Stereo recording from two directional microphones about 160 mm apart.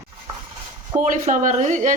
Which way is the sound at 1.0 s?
55° right (ahead or behind).